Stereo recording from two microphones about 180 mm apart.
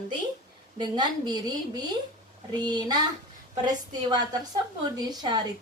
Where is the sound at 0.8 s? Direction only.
25° right (ahead or behind).